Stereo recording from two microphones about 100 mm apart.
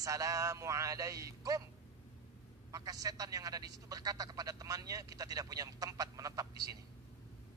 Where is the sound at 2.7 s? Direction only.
35° right (ahead or behind).